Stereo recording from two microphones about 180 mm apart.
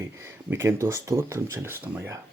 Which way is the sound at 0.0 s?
15° right (ahead or behind).